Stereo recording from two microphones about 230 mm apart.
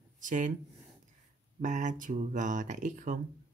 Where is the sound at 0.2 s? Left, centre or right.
Right.